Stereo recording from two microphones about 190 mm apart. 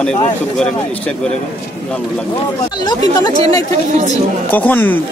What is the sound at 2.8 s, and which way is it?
Speech, 20° left (ahead or behind).